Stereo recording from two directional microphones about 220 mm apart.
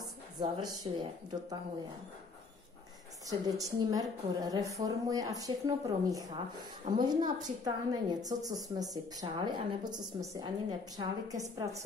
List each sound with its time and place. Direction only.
0.0 s speech: 20° right (ahead or behind)
3.3 s a woman's voice: 15° right (ahead or behind)